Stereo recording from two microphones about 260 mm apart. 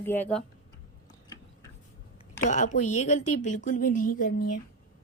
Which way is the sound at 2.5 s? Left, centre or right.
Left.